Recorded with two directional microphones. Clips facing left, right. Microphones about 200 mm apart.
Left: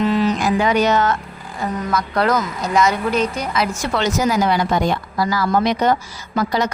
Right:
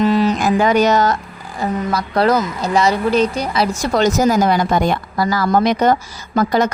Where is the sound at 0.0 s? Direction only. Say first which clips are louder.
Right 3 dB; 35° right (ahead or behind).